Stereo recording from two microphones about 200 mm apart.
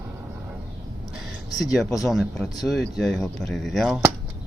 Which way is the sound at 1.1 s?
Centre (ahead or behind).